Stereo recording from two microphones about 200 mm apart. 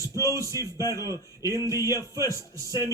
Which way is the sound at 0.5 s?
15° left (ahead or behind).